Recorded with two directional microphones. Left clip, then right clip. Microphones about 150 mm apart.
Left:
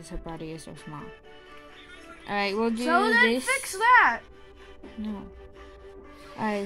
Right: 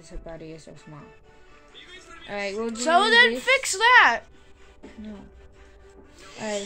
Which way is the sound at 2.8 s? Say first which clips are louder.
Right 5 dB; 30° right (ahead or behind).